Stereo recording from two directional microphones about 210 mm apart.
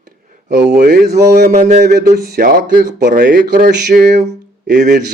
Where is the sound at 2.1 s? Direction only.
45° right (ahead or behind).